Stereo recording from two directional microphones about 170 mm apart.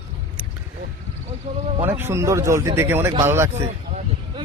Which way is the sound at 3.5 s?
40° right (ahead or behind).